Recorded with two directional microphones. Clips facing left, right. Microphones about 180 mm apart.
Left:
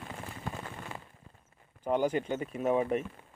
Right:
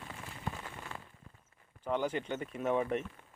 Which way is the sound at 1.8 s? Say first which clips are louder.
Left 5 dB; 10° left (ahead or behind).